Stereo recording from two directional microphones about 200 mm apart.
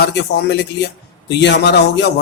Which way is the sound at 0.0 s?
55° left (ahead or behind).